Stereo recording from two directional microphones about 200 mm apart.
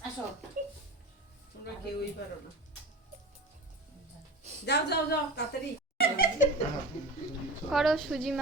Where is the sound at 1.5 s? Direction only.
50° left (ahead or behind).